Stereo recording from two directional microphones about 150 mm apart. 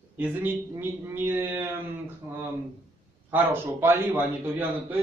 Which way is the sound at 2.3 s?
15° right (ahead or behind).